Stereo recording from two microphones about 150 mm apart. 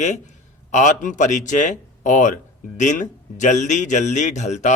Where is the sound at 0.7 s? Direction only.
55° left (ahead or behind).